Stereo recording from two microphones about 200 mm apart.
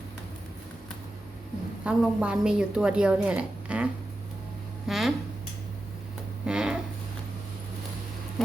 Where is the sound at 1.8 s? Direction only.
5° right (ahead or behind).